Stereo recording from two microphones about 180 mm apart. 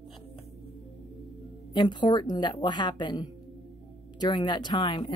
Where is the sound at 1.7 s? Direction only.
25° left (ahead or behind).